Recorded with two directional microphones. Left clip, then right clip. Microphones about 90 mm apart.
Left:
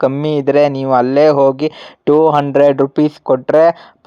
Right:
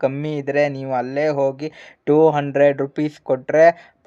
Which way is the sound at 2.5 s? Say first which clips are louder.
Left 6 dB; 40° left (ahead or behind).